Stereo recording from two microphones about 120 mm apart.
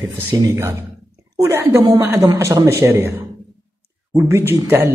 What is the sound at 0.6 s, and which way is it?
A woman's voice, 20° right (ahead or behind).